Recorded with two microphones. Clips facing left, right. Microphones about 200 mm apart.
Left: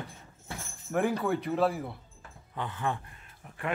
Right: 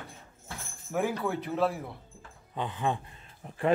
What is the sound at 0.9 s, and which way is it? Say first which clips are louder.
Speech: left 2 dB; centre (ahead or behind).